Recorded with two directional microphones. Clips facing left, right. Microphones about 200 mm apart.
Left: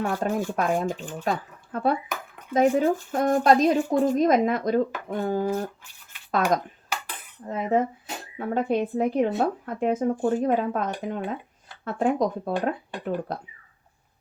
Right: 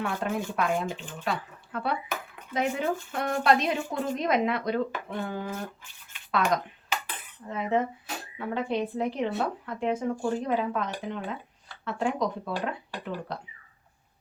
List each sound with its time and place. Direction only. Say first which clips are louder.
0.0 s speech: left 4 dB; 40° left (ahead or behind)
7.4 s speech: left 4 dB; 45° left (ahead or behind)